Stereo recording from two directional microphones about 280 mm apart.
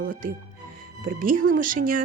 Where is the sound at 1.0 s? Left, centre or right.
Right.